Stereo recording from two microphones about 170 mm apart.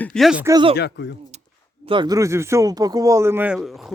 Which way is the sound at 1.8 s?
30° right (ahead or behind).